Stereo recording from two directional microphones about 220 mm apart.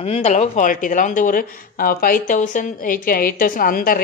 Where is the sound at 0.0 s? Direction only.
30° left (ahead or behind).